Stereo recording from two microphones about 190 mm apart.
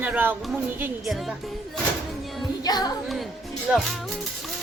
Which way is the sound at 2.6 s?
20° left (ahead or behind).